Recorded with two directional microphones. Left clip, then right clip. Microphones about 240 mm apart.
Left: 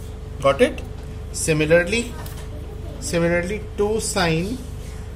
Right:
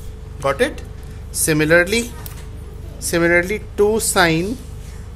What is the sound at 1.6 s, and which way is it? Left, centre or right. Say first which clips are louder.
Speech: right 3 dB; right.